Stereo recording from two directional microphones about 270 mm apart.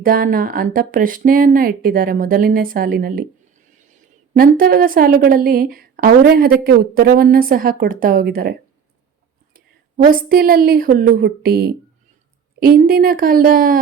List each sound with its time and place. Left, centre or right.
0.0 s a woman's voice: right
4.4 s a woman's voice: right
10.1 s a woman's voice: right